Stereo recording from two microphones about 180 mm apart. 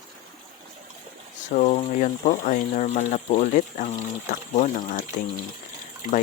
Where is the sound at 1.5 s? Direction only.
40° left (ahead or behind).